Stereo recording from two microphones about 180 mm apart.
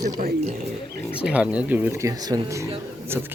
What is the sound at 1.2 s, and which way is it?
Speech, 5° right (ahead or behind).